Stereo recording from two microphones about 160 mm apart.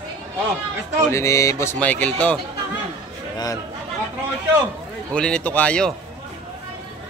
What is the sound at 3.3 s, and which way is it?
Speech, 25° left (ahead or behind).